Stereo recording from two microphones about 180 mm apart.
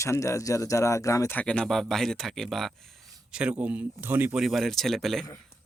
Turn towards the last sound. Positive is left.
turn(degrees=0)  # may be behind; listen again after turning